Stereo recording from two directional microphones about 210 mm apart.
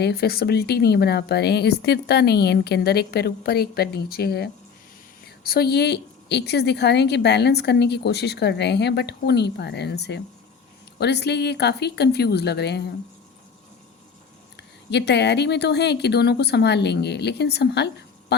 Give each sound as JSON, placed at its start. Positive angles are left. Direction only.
{"t": 0.0, "sound": "a woman's voice", "side_deg": 50}
{"t": 14.5, "sound": "a woman's voice", "side_deg": 55}